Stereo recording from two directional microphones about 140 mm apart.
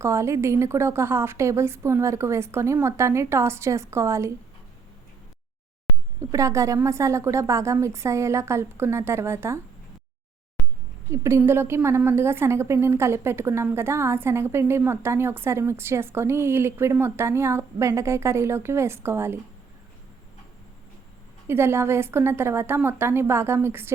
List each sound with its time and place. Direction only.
0.0 s a woman's voice: 20° right (ahead or behind)
6.3 s a woman's voice: 20° right (ahead or behind)
11.1 s a woman's voice: 20° right (ahead or behind)
21.4 s a woman's voice: 15° right (ahead or behind)